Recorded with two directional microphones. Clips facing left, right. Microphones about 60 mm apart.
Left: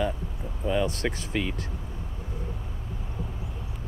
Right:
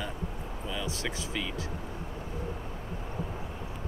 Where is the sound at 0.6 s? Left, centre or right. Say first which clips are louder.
Left 9 dB; left.